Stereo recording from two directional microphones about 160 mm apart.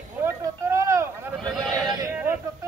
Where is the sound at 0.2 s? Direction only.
15° right (ahead or behind).